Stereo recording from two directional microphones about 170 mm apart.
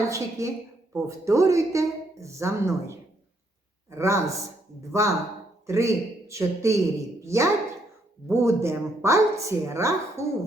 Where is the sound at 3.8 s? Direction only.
15° right (ahead or behind).